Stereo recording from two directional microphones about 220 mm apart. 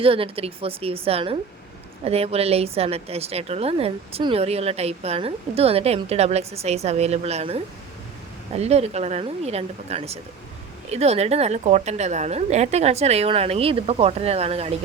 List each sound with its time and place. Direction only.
0.0 s a woman's voice: 25° right (ahead or behind)